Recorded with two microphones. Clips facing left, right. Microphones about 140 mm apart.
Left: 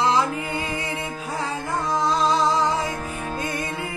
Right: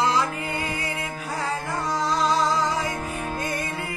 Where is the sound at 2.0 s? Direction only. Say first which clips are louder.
Left 1 dB; 25° left (ahead or behind).